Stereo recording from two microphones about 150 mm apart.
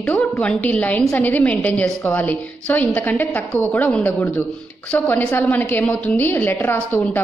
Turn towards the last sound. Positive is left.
turn(degrees=10)  # may be behind; listen again after turning